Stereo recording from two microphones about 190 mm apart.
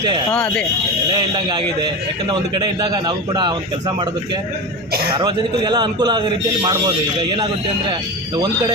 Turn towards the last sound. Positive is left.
turn(degrees=-25)  # may be behind; listen again after turning